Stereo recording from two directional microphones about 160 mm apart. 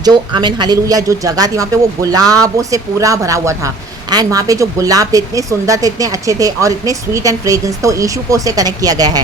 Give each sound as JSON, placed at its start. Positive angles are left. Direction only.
{"t": 0.0, "sound": "a woman's voice", "side_deg": -25}